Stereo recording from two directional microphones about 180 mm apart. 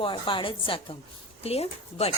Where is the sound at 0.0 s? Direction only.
30° left (ahead or behind).